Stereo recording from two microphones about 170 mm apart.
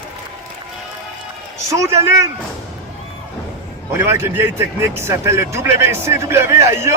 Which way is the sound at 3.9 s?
15° right (ahead or behind).